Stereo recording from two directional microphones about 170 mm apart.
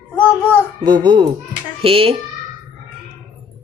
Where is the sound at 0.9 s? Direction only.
25° right (ahead or behind).